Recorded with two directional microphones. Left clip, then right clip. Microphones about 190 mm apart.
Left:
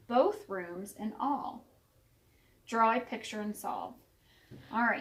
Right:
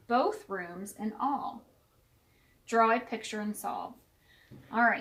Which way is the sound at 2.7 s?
35° right (ahead or behind).